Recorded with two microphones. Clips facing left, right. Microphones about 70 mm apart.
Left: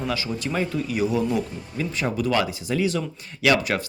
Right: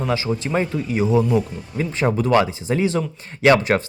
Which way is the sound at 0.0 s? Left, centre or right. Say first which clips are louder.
Right 5 dB; right.